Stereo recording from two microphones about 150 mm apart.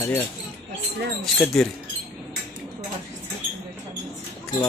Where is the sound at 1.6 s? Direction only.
5° left (ahead or behind).